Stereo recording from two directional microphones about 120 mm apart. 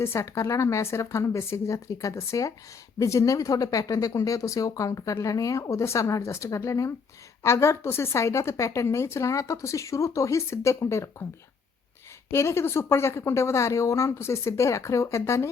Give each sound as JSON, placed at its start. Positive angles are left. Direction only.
{"t": 0.0, "sound": "speech", "side_deg": 20}
{"t": 12.3, "sound": "speech", "side_deg": 20}